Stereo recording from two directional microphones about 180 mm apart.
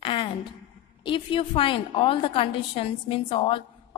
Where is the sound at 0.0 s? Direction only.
30° left (ahead or behind).